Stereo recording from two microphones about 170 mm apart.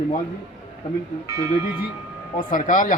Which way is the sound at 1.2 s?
20° right (ahead or behind).